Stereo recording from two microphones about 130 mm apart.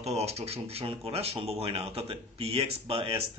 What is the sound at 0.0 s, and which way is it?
Speech, 55° right (ahead or behind).